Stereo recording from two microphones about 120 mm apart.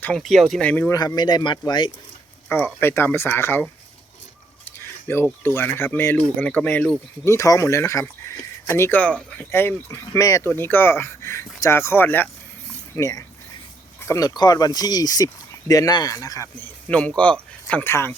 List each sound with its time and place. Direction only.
0.0 s speech: 5° left (ahead or behind)
0.6 s speech: 10° left (ahead or behind)
0.9 s speech: 35° left (ahead or behind)
2.5 s speech: 20° left (ahead or behind)
5.0 s speech: 20° left (ahead or behind)
7.3 s speech: 25° left (ahead or behind)
9.0 s speech: 10° left (ahead or behind); by 10.5 s 25° left (ahead or behind)
10.5 s speech: 15° left (ahead or behind)
13.0 s speech: 30° left (ahead or behind)
16.6 s speech: 15° left (ahead or behind)